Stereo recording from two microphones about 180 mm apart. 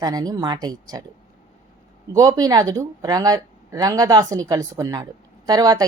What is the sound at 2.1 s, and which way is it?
Speech, 20° right (ahead or behind).